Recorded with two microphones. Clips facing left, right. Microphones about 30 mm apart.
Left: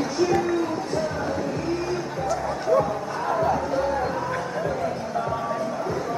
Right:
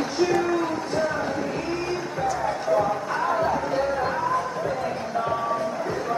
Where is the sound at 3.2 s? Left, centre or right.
Centre.